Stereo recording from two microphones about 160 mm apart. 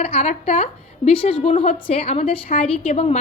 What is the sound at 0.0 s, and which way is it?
A woman's voice, 45° left (ahead or behind).